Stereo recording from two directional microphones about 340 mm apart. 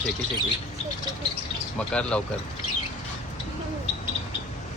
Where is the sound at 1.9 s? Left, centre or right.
Centre.